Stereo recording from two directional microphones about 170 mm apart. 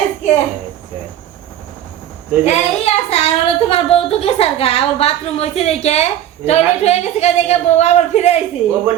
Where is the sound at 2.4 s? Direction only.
35° left (ahead or behind).